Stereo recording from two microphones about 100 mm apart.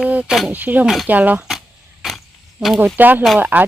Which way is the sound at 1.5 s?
Centre (ahead or behind).